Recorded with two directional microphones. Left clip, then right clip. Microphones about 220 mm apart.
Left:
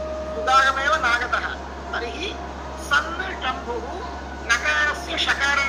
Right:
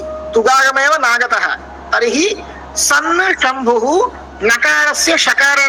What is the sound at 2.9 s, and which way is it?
A man's voice, 60° right (ahead or behind).